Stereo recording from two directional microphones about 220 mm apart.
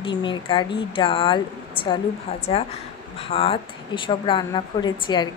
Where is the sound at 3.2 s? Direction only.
25° left (ahead or behind).